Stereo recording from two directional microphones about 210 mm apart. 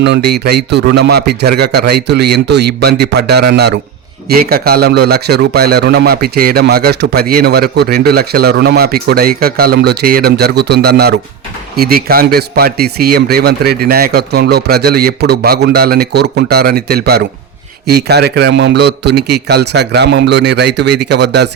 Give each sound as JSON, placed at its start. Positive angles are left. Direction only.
{"t": 0.0, "sound": "speech", "side_deg": -50}